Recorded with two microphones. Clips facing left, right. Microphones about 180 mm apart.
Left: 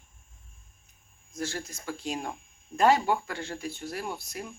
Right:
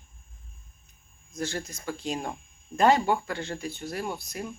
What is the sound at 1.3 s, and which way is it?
Speech, 5° left (ahead or behind).